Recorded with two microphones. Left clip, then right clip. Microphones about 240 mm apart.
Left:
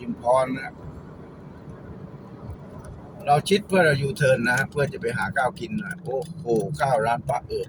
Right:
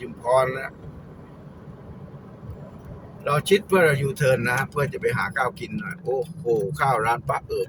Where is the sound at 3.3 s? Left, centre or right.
Centre.